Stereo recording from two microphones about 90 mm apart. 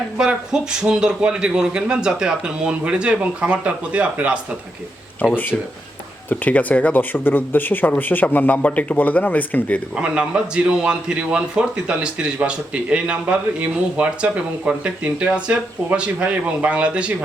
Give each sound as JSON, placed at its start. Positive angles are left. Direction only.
{"t": 0.2, "sound": "speech", "side_deg": -10}
{"t": 6.2, "sound": "speech", "side_deg": 20}
{"t": 9.9, "sound": "speech", "side_deg": -10}